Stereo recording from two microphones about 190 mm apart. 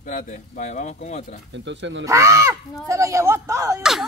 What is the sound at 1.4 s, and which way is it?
Speech, 70° right (ahead or behind).